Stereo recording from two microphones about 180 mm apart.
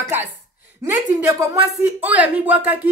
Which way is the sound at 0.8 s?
15° right (ahead or behind).